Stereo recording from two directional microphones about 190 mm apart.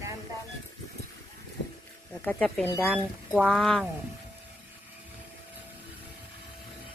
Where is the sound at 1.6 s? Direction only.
65° left (ahead or behind).